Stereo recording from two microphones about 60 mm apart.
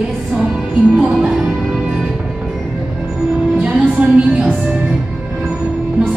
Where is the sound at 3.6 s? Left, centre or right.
Right.